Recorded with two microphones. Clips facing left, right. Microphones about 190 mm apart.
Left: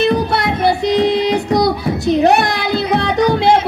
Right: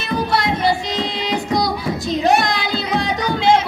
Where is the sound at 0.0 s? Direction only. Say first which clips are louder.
Left 5 dB; 60° left (ahead or behind).